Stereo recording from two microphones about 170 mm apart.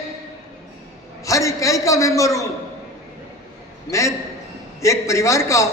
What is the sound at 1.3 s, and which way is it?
A man's voice, 20° left (ahead or behind).